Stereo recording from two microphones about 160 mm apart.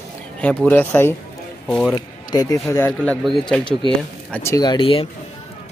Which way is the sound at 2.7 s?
10° left (ahead or behind).